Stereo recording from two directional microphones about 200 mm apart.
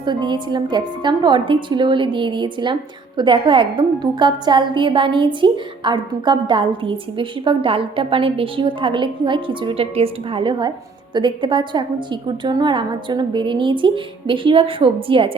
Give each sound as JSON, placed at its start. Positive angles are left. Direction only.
{"t": 0.0, "sound": "a woman's voice", "side_deg": -20}